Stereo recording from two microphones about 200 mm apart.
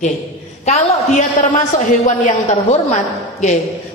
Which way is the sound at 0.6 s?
35° left (ahead or behind).